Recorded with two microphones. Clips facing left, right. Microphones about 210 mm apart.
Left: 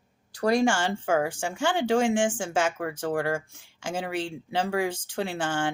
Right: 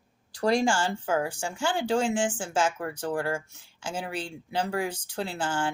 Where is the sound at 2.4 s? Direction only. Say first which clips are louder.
Left 1 dB; 85° left.